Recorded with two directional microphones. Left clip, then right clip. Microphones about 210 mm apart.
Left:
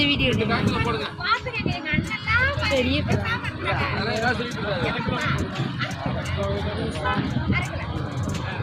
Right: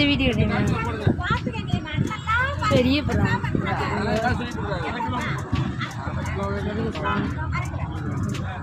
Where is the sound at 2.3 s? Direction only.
45° right (ahead or behind).